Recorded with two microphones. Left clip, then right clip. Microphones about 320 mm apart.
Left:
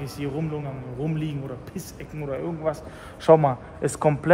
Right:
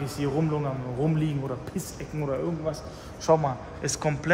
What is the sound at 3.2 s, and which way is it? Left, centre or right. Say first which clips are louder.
Speech: left 6 dB; left.